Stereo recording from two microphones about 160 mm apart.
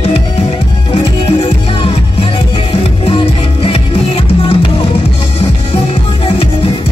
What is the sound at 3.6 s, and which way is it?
Music, 35° left (ahead or behind).